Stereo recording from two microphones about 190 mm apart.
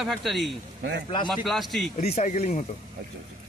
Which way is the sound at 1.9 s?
35° left (ahead or behind).